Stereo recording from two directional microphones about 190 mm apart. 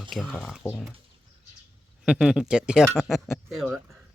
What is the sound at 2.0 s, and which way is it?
Speech, 5° right (ahead or behind).